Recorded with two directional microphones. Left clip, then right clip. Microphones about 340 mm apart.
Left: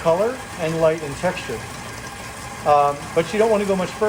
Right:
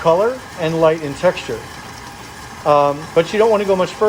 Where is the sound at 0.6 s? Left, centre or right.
Right.